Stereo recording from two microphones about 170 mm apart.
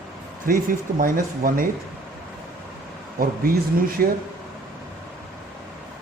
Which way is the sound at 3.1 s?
60° right (ahead or behind).